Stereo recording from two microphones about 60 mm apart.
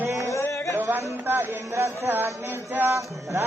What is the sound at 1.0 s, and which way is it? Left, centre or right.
Music, right.